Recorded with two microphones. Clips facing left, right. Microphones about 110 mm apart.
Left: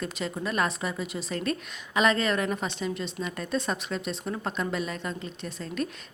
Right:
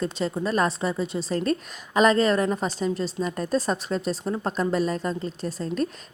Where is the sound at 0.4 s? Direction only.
35° right (ahead or behind).